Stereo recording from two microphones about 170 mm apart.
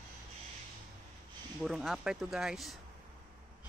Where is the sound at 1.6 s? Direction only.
Centre (ahead or behind).